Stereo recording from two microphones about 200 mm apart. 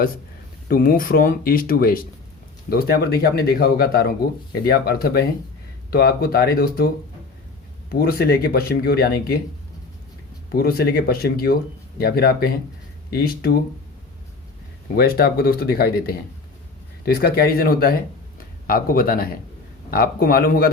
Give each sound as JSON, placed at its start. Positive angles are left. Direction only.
{"t": 0.7, "sound": "speech", "side_deg": 45}
{"t": 10.5, "sound": "speech", "side_deg": 50}
{"t": 14.9, "sound": "speech", "side_deg": 50}